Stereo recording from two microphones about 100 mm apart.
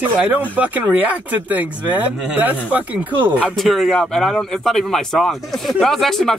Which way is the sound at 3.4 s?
Centre (ahead or behind).